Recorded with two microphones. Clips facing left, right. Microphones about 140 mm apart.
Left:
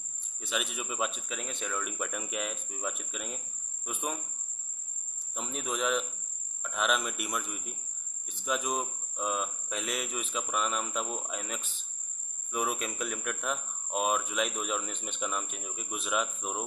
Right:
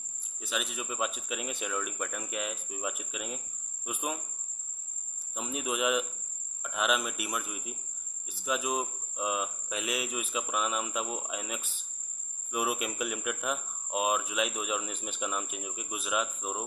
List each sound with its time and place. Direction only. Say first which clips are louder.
0.4 s speech: even; centre (ahead or behind)
5.3 s a man's voice: right 2 dB; 5° right (ahead or behind)